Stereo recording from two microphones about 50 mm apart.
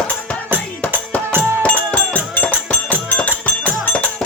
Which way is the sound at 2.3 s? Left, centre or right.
Left.